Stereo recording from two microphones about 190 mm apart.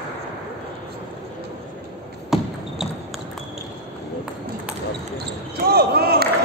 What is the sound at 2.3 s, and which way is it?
Basketball bounce, centre (ahead or behind).